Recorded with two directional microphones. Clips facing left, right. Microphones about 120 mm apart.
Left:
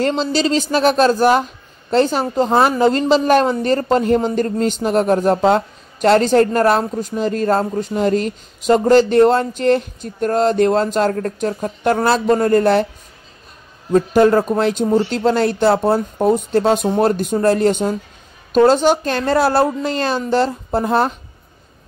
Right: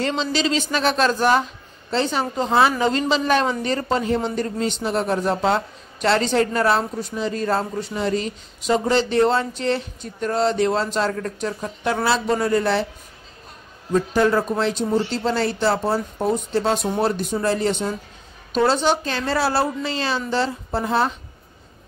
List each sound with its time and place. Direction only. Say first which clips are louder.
0.0 s a woman's voice: left 5 dB; 40° left (ahead or behind)
13.9 s a woman's voice: left 6 dB; 50° left (ahead or behind)